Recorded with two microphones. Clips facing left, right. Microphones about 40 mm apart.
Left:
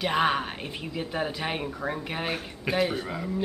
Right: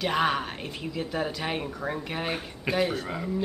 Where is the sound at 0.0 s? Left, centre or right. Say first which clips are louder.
Left 1 dB; centre.